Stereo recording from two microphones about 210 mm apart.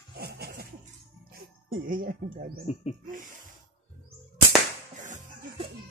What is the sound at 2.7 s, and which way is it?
Speech, 30° left (ahead or behind).